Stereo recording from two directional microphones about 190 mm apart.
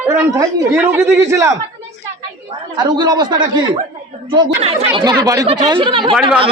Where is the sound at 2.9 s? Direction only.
25° right (ahead or behind).